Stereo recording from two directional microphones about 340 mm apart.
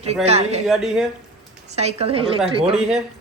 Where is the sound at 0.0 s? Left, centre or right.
Centre.